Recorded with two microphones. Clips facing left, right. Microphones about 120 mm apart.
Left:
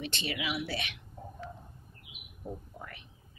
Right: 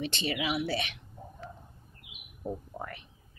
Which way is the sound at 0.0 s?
30° right (ahead or behind).